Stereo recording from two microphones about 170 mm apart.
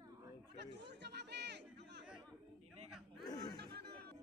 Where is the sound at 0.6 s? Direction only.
90° right.